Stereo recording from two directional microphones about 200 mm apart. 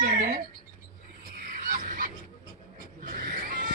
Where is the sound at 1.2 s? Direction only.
40° right (ahead or behind).